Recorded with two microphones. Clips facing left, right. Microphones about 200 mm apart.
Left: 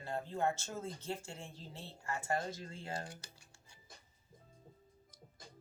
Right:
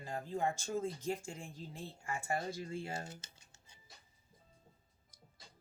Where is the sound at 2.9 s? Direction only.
25° right (ahead or behind).